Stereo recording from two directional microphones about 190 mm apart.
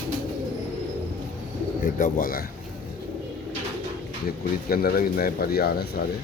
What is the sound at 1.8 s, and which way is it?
Speech, 45° left (ahead or behind).